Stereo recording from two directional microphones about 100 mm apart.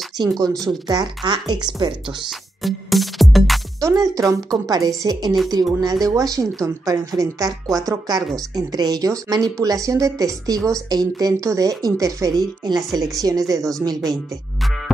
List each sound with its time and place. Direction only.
0.2 s a woman's voice: 40° right (ahead or behind)
2.2 s music: centre (ahead or behind)
3.8 s a woman's voice: 35° right (ahead or behind)